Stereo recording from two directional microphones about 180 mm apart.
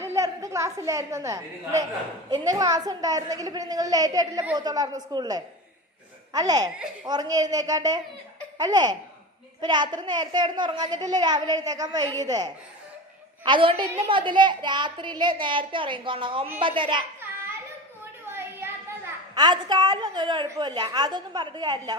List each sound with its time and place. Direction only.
0.0 s a woman's voice: 15° right (ahead or behind)
18.3 s a sound: 15° right (ahead or behind)
19.3 s a child's voice: 25° right (ahead or behind)